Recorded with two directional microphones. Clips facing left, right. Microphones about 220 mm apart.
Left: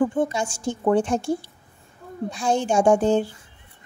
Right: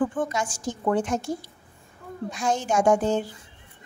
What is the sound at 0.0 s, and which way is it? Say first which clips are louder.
A woman's voice: left 4 dB; 25° left (ahead or behind).